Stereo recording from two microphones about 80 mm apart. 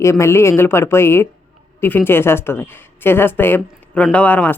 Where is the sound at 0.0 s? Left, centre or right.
Left.